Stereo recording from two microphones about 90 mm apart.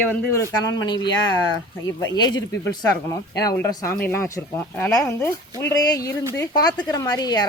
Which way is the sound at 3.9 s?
25° left (ahead or behind).